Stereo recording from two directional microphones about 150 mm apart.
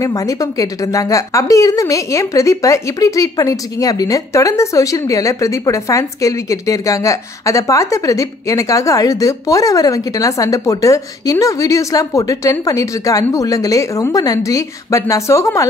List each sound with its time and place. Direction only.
0.0 s a woman's voice: 20° left (ahead or behind)